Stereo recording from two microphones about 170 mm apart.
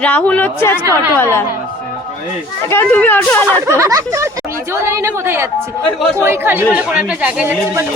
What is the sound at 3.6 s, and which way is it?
Speech, 15° right (ahead or behind).